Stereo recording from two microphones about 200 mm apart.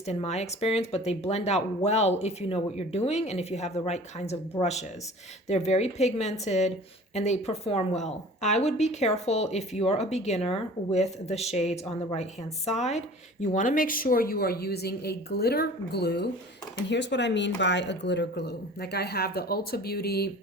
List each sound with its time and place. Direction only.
0.0 s a woman's voice: 30° left (ahead or behind); by 20.3 s 50° left (ahead or behind)